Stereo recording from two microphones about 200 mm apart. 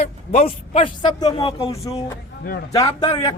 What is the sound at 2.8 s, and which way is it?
Speech, 20° left (ahead or behind).